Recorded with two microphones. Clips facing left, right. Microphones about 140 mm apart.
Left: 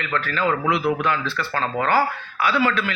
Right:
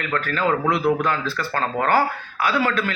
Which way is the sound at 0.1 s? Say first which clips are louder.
Right 1 dB; 45° right (ahead or behind).